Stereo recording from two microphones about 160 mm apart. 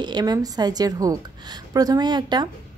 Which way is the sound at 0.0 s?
25° right (ahead or behind).